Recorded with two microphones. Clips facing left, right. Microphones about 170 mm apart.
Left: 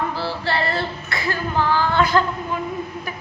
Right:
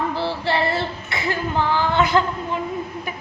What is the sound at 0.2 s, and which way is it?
Female singing, 20° right (ahead or behind).